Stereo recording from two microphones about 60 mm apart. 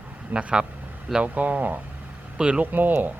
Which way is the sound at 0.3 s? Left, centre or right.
Right.